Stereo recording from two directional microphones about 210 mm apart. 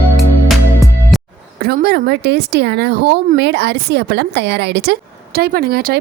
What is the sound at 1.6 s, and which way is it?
Speech, 50° right (ahead or behind).